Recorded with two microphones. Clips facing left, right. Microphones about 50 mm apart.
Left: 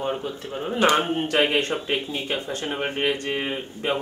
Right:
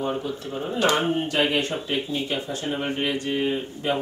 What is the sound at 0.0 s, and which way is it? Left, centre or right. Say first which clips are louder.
A man's voice: even; left.